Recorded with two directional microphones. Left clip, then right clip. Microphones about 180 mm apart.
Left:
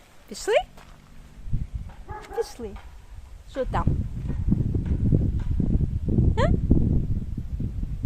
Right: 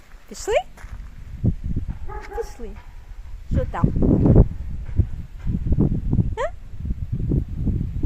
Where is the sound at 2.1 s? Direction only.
80° left.